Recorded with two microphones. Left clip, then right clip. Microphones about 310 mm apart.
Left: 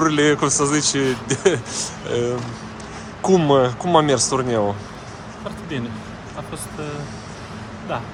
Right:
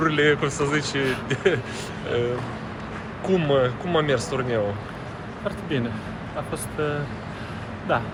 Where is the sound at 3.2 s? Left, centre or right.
Left.